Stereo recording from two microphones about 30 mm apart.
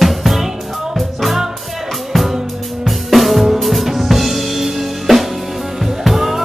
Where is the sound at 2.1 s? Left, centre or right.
Centre.